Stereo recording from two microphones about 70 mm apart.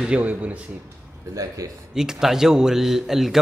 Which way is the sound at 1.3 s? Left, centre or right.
Right.